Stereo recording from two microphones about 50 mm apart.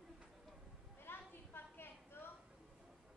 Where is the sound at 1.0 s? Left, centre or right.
Left.